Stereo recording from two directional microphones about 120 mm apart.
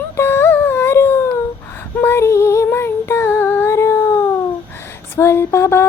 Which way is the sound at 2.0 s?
20° left (ahead or behind).